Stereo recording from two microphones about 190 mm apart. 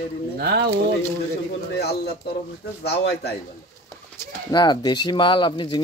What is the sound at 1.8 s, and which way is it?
Speech, 60° left (ahead or behind).